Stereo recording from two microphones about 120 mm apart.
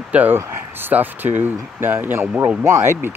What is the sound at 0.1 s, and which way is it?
Speech, 15° right (ahead or behind).